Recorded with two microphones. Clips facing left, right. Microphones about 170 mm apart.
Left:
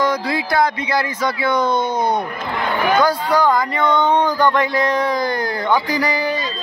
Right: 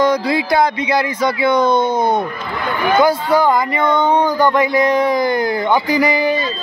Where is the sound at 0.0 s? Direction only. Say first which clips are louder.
Right 4 dB; 20° right (ahead or behind).